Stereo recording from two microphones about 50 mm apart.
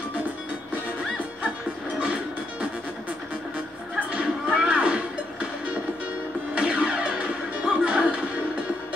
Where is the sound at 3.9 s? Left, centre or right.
Right.